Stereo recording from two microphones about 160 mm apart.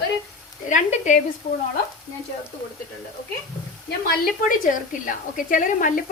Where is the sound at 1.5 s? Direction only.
40° left (ahead or behind).